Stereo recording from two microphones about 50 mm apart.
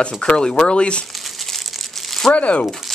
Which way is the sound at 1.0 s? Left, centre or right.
Centre.